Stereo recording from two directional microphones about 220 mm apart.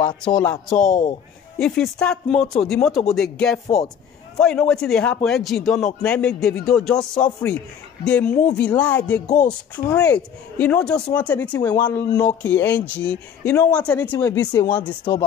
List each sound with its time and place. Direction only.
0.0 s speech: 20° left (ahead or behind)
0.4 s a man's voice: 5° left (ahead or behind)
0.8 s speech: 35° left (ahead or behind)
1.6 s a man's voice: 5° left (ahead or behind)
9.3 s speech: 35° left (ahead or behind)
9.8 s speech: 5° left (ahead or behind)